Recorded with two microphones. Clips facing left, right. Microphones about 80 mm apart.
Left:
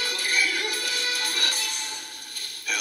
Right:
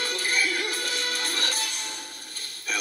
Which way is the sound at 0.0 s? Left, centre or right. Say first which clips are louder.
Even; right.